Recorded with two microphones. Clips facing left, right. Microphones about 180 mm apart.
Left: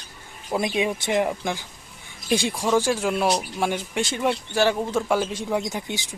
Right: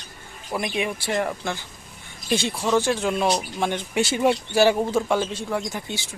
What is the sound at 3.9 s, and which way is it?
Speech, 5° right (ahead or behind).